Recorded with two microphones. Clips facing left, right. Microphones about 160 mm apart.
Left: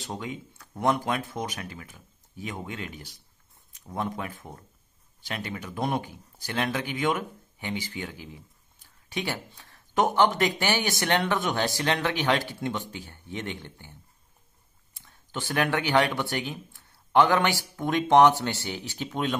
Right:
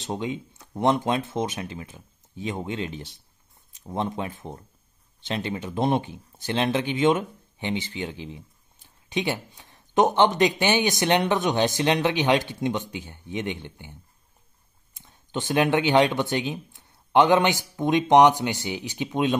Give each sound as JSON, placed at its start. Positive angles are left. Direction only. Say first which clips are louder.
{"t": 0.0, "sound": "speech", "louder": "right 6 dB", "side_deg": -25}
{"t": 15.0, "sound": "speech", "louder": "right 5 dB", "side_deg": -20}